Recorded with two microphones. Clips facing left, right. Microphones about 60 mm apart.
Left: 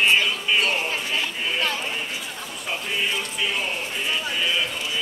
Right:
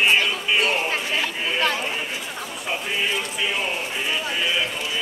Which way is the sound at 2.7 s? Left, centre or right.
Centre.